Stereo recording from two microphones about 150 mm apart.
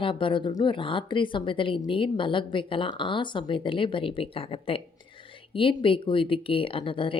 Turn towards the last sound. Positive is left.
turn(degrees=35)  # may be behind; listen again after turning